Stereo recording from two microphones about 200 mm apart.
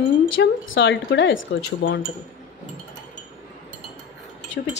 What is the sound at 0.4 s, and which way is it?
Speech, 65° left (ahead or behind).